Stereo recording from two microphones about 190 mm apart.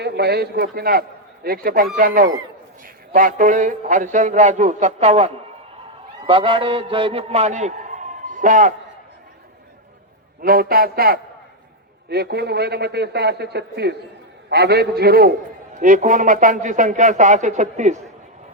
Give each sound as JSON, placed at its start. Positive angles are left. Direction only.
{"t": 0.0, "sound": "a man's voice", "side_deg": -60}
{"t": 10.4, "sound": "a man's voice", "side_deg": -50}
{"t": 15.8, "sound": "a man's voice", "side_deg": -45}